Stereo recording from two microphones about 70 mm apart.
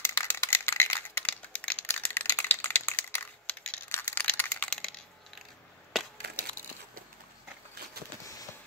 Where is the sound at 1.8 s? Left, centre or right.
Left.